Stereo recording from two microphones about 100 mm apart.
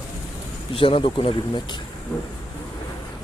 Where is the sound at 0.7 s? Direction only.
65° left (ahead or behind).